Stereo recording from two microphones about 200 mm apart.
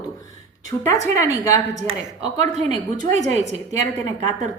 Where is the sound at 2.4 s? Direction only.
35° right (ahead or behind).